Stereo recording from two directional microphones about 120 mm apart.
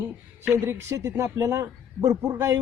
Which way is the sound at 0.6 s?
25° right (ahead or behind).